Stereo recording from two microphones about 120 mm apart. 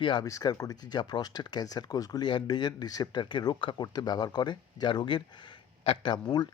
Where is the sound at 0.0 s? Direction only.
40° left (ahead or behind).